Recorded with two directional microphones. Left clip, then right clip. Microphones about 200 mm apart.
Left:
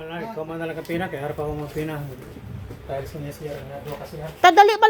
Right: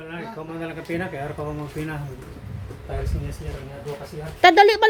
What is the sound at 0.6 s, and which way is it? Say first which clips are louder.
Speech: even; centre (ahead or behind).